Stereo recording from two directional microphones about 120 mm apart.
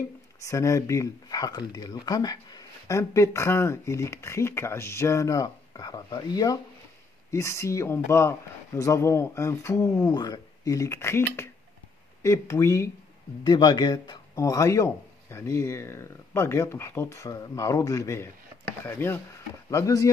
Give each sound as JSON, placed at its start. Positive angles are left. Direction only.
{"t": 0.4, "sound": "speech", "side_deg": 25}
{"t": 13.4, "sound": "speech", "side_deg": 35}
{"t": 19.7, "sound": "speech", "side_deg": 30}